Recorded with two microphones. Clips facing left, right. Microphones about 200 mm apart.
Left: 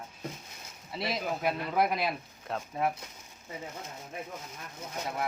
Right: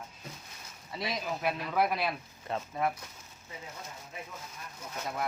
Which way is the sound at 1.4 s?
15° left (ahead or behind).